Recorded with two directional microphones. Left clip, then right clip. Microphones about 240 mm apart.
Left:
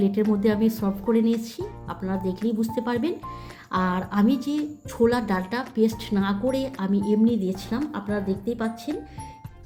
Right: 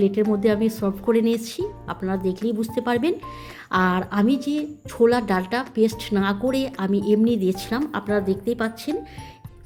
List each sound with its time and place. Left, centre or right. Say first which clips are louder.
0.0 s a woman's voice: right 3 dB; centre